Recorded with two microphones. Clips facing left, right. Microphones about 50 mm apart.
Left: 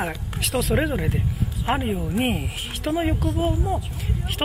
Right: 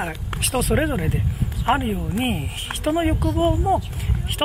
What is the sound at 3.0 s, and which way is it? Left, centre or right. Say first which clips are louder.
Speech: right 2 dB; centre.